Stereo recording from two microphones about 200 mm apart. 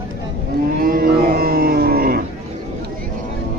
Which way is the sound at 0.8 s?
50° right (ahead or behind).